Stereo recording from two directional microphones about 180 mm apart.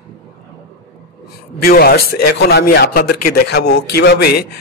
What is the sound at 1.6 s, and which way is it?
A man's voice, 55° left (ahead or behind).